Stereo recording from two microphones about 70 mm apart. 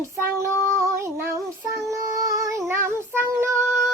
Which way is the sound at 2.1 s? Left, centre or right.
Right.